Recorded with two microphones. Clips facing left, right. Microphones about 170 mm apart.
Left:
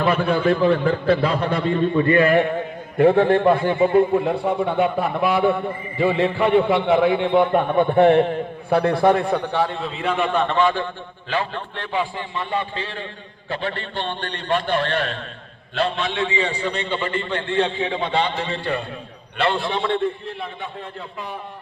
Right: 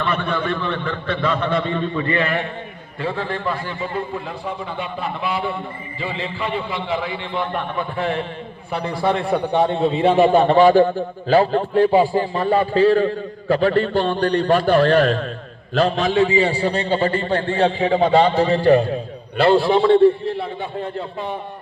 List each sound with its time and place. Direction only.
0.0 s a man's voice: 40° left (ahead or behind); by 7.4 s 65° left (ahead or behind)
7.5 s a man's voice: 25° left (ahead or behind)
7.9 s a man's voice: 60° left (ahead or behind)
9.1 s a man's voice: 5° right (ahead or behind); by 20.7 s 30° right (ahead or behind)